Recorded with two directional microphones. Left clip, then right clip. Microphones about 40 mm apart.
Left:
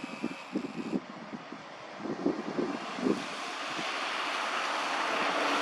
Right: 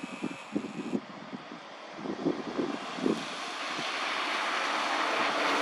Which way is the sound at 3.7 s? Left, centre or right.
Right.